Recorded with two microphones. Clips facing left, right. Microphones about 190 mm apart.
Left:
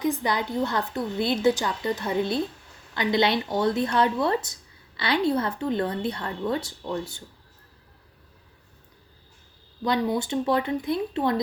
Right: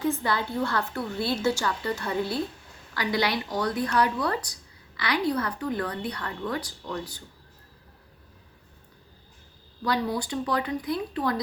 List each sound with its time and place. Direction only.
0.0 s a woman's voice: 15° left (ahead or behind)
9.8 s a woman's voice: 20° left (ahead or behind)